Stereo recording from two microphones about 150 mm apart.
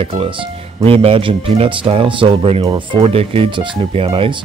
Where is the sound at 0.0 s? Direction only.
35° right (ahead or behind).